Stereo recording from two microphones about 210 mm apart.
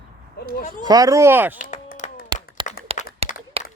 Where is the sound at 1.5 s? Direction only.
40° left (ahead or behind).